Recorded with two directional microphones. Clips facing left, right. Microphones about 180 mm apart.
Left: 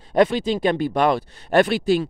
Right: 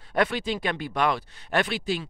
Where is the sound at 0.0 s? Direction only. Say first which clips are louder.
Left 8 dB; 25° left (ahead or behind).